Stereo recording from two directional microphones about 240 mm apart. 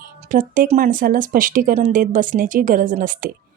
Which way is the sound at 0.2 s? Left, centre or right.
Right.